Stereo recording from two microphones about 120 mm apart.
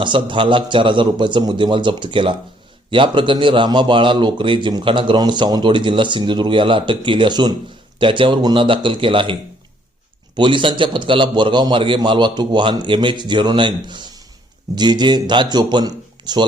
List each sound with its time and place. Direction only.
0.0 s a man's voice: 40° right (ahead or behind)
10.3 s a man's voice: 45° right (ahead or behind)